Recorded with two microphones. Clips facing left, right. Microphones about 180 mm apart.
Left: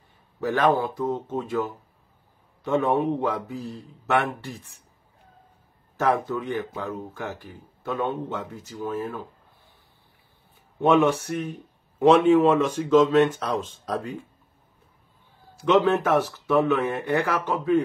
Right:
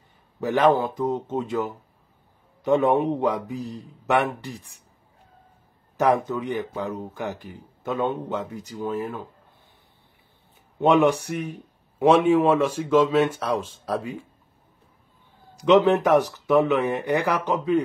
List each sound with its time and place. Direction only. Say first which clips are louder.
0.4 s speech: right 2 dB; 20° right (ahead or behind)
5.9 s speech: right 2 dB; 15° right (ahead or behind)
10.8 s speech: right 1 dB; 15° right (ahead or behind)
15.5 s speech: right 3 dB; 15° right (ahead or behind)